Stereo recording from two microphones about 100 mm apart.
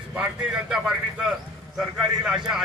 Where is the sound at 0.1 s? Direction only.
10° right (ahead or behind).